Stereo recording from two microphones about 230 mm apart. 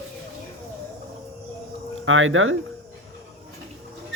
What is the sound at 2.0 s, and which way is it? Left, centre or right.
Speech, right.